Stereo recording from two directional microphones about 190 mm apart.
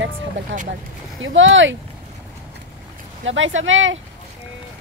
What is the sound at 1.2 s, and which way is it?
Speech, 85° right.